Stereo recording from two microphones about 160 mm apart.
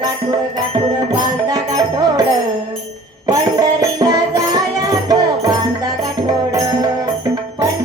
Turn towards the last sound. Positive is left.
turn(degrees=-25)  # may be behind; listen again after turning